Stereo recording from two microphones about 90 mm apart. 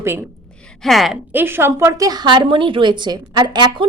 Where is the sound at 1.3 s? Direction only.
25° right (ahead or behind).